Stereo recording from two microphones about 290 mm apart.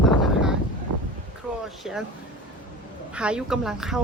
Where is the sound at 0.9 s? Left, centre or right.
Right.